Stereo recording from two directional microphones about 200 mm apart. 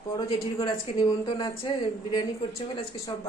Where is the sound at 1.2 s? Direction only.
25° left (ahead or behind).